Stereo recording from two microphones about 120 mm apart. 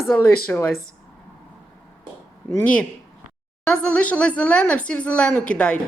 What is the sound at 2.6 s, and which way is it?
A woman's voice, 10° left (ahead or behind).